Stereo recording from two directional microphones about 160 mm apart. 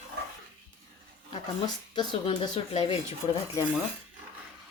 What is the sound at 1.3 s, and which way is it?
Speech, 30° left (ahead or behind).